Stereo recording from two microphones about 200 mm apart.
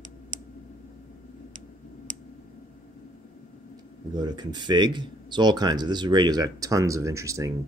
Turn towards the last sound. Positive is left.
turn(degrees=-15)  # may be behind; listen again after turning